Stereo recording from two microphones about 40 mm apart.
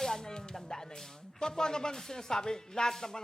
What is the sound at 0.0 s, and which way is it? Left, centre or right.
Music, centre.